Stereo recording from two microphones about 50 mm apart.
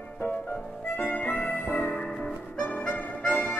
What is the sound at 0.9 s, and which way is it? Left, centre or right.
Harmonica, left.